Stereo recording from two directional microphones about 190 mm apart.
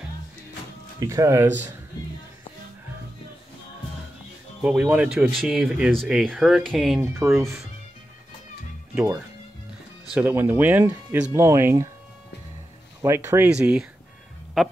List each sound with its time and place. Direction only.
0.9 s speech: 15° right (ahead or behind)
4.8 s speech: 5° right (ahead or behind)
7.0 s speech: 15° right (ahead or behind)
10.0 s speech: 10° right (ahead or behind)
13.0 s speech: 15° right (ahead or behind)